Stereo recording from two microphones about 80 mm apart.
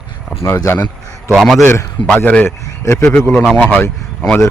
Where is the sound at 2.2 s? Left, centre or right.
Centre.